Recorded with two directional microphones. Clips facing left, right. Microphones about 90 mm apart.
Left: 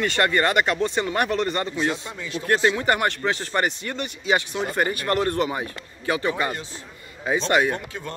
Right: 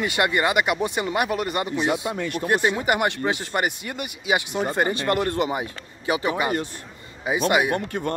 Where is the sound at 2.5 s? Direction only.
15° right (ahead or behind).